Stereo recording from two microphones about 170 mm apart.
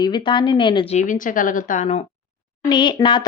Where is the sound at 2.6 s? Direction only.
25° left (ahead or behind).